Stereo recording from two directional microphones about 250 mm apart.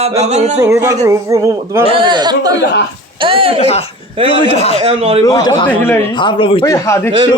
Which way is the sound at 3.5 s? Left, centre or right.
Left.